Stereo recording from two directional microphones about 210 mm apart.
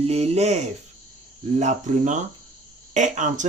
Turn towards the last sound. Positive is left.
turn(degrees=-35)  # may be behind; listen again after turning